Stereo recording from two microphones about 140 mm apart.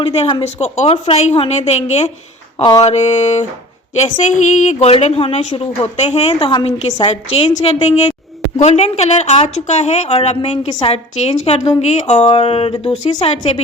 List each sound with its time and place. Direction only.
0.0 s a woman's voice: 45° left (ahead or behind)
0.4 s a woman's voice: 55° left (ahead or behind)
10.7 s a woman's voice: 35° left (ahead or behind)
10.9 s a woman's voice: 50° left (ahead or behind)
12.2 s a woman's voice: 40° left (ahead or behind)